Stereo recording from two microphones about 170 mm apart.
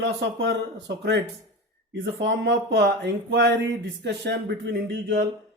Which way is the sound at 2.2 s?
90° right.